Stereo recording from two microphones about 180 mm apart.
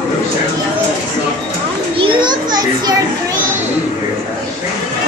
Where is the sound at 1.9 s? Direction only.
30° right (ahead or behind).